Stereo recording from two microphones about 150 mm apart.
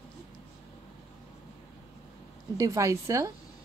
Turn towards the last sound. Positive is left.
turn(degrees=-20)  # may be behind; listen again after turning